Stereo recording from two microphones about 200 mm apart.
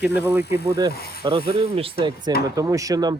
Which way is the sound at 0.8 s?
25° right (ahead or behind).